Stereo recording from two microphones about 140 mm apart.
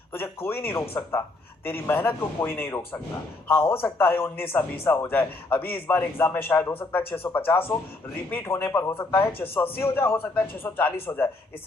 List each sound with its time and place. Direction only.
0.1 s a man's voice: 15° left (ahead or behind)